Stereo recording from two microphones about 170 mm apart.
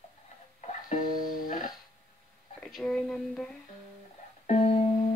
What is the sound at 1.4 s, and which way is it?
Music, 50° left (ahead or behind).